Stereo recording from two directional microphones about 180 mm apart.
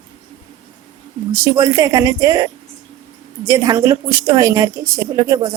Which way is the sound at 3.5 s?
20° right (ahead or behind).